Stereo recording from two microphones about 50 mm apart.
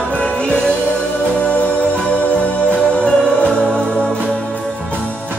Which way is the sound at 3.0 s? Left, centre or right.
Centre.